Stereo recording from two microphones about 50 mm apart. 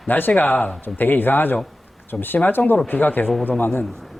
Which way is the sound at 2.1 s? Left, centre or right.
Centre.